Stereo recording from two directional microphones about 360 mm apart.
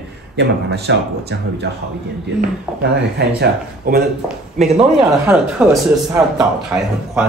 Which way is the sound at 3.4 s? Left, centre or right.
Right.